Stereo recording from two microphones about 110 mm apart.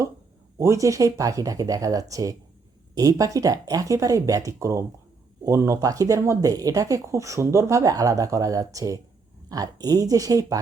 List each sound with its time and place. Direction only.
0.6 s speech: 30° right (ahead or behind)